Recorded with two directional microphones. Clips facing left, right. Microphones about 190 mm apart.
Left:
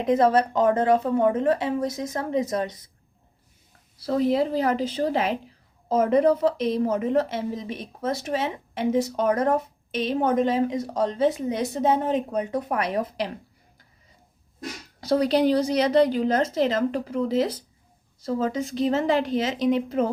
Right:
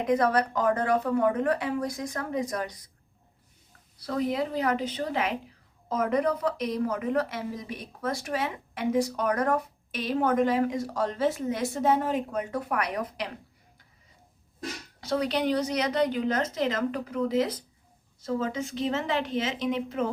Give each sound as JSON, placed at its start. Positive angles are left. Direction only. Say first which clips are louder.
{"t": 0.0, "sound": "speech", "louder": "left 4 dB", "side_deg": 25}
{"t": 4.0, "sound": "a woman's voice", "louder": "left 6 dB", "side_deg": 30}
{"t": 15.0, "sound": "a woman's voice", "louder": "left 6 dB", "side_deg": 35}